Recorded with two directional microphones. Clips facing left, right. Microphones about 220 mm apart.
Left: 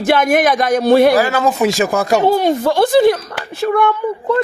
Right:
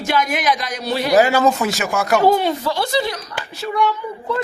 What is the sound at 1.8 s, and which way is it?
Speech, 35° left (ahead or behind).